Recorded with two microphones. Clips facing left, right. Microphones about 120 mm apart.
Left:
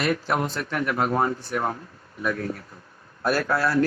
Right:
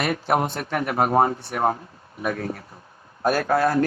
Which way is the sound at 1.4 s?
60° right (ahead or behind).